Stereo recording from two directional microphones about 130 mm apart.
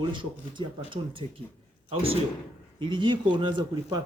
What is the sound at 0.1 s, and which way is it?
A man's voice, 40° right (ahead or behind).